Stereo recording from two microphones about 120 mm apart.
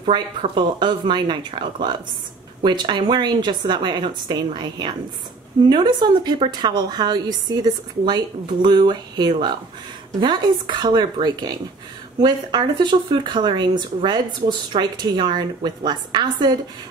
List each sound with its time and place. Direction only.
0.6 s speech: 40° right (ahead or behind)